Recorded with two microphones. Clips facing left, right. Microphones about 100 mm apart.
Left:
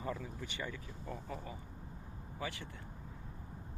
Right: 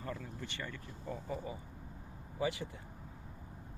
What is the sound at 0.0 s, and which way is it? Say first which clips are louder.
Speech: left 2 dB; 5° left (ahead or behind).